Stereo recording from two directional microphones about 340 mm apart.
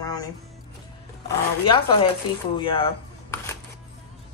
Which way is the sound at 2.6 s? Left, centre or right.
Centre.